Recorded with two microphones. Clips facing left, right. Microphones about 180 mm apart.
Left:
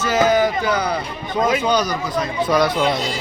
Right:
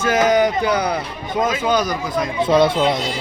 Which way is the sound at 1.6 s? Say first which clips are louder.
Even; 5° right (ahead or behind).